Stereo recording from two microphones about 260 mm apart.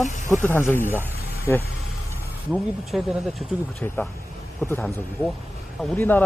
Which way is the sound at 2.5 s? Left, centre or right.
Centre.